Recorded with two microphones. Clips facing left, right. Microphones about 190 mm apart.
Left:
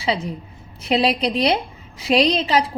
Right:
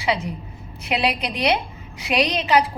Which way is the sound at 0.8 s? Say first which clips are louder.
Left 4 dB; 30° left (ahead or behind).